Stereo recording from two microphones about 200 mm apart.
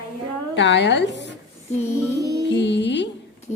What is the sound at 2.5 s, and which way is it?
Music, 60° left (ahead or behind).